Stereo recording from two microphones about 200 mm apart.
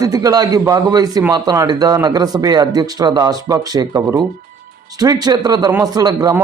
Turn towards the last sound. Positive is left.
turn(degrees=-20)  # may be behind; listen again after turning